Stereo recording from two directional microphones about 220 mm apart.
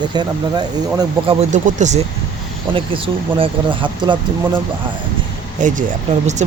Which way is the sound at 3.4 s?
20° right (ahead or behind).